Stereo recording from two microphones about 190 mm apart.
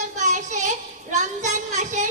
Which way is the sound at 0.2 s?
40° right (ahead or behind).